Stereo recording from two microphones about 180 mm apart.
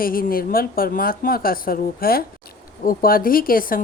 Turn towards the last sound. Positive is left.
turn(degrees=50)  # may be behind; listen again after turning